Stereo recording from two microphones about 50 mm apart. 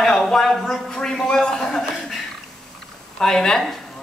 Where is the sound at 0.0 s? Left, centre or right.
Centre.